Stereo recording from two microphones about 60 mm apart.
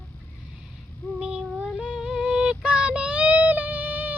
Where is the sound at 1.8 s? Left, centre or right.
Centre.